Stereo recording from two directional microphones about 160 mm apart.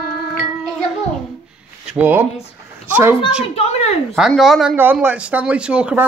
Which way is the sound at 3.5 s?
40° left (ahead or behind).